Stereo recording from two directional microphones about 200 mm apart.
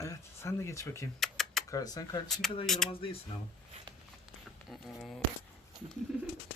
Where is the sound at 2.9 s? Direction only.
30° left (ahead or behind).